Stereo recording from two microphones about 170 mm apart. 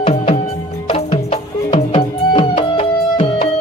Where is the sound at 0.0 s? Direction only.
35° left (ahead or behind).